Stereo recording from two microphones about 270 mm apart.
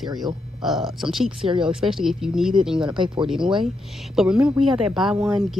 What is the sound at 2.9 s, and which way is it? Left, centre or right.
Speech, centre.